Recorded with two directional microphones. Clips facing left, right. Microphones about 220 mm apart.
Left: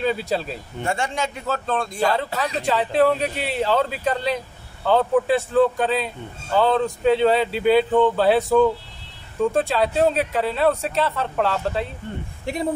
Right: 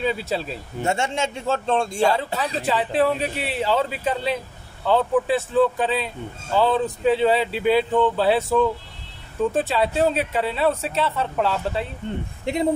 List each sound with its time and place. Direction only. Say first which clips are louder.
0.0 s speech: left 1 dB; centre (ahead or behind)
0.8 s a man's voice: right 1 dB; 25° right (ahead or behind)
2.6 s speech: left 2 dB; centre (ahead or behind)
12.5 s a man's voice: right 3 dB; 20° right (ahead or behind)